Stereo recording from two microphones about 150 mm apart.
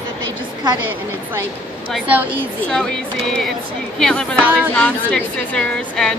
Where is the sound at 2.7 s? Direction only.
5° left (ahead or behind).